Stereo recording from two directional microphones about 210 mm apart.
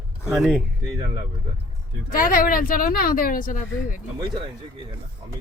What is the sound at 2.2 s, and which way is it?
Speech, 40° left (ahead or behind).